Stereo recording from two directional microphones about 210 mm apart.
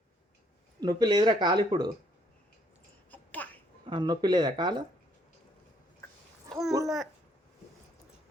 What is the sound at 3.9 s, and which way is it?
Speech, 20° right (ahead or behind).